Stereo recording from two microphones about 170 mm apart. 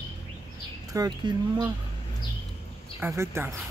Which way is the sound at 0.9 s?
20° right (ahead or behind).